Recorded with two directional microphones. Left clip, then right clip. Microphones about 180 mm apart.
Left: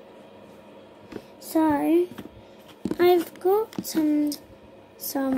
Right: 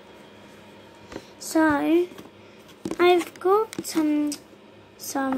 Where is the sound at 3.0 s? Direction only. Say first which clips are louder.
Right 1 dB; 20° left (ahead or behind).